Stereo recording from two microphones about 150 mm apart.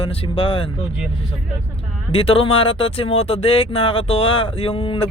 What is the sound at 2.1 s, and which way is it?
Speech, 40° left (ahead or behind).